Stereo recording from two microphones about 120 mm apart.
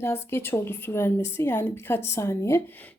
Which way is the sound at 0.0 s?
20° left (ahead or behind).